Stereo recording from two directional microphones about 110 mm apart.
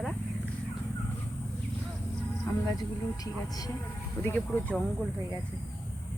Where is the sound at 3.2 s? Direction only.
35° left (ahead or behind).